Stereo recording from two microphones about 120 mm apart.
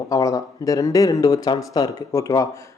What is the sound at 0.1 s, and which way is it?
Speech, 30° left (ahead or behind).